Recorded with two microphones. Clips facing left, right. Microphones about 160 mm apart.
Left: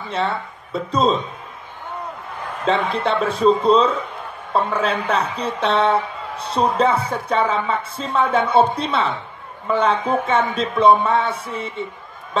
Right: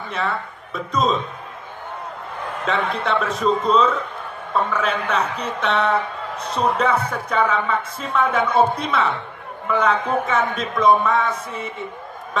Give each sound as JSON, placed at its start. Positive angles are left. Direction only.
{"t": 0.7, "sound": "a woman's voice", "side_deg": 30}
{"t": 2.6, "sound": "a woman's voice", "side_deg": 30}